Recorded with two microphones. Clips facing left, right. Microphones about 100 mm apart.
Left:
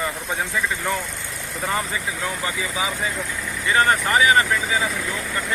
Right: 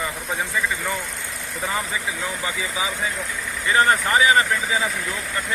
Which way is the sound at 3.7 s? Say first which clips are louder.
Even; 30° right (ahead or behind).